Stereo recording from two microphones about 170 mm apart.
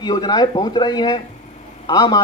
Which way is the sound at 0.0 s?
25° left (ahead or behind).